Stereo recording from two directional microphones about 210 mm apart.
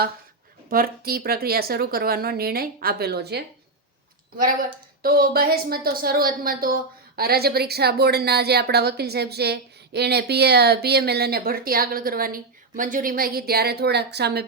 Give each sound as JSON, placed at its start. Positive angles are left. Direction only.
{"t": 0.7, "sound": "speech", "side_deg": -45}
{"t": 5.0, "sound": "speech", "side_deg": -45}